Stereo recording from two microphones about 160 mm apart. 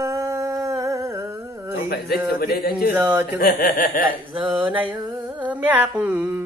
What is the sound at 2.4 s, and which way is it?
Speech, 70° left (ahead or behind).